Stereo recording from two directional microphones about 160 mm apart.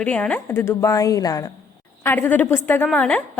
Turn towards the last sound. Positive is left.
turn(degrees=5)  # may be behind; listen again after turning